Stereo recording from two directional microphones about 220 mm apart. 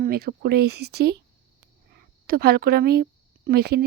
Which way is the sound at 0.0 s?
45° right (ahead or behind).